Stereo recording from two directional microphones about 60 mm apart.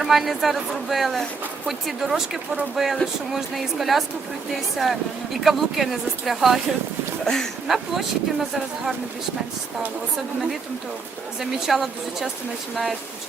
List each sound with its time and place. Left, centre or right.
0.0 s speech: centre
7.3 s speech: centre
7.7 s speech: centre
11.3 s speech: centre